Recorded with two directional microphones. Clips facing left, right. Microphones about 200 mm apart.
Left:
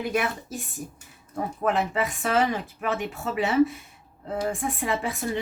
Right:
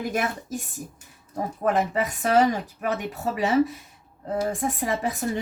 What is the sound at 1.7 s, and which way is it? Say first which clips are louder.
Speech: right 2 dB; 40° right (ahead or behind).